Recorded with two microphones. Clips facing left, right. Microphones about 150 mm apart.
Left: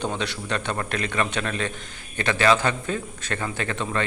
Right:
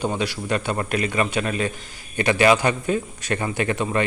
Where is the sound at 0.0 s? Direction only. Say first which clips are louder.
Right 3 dB; 10° right (ahead or behind).